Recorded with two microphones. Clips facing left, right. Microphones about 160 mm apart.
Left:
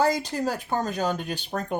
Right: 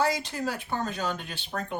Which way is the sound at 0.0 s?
40° left (ahead or behind).